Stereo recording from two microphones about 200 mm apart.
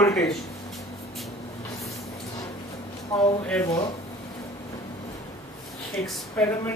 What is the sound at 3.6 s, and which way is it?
Speech, 15° left (ahead or behind).